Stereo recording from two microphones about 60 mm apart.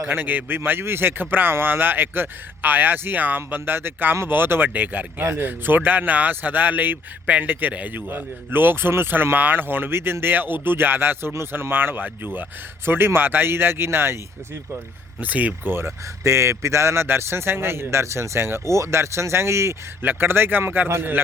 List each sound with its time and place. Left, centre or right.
0.1 s speech: right
15.2 s speech: right
16.2 s a man's voice: right
20.0 s speech: right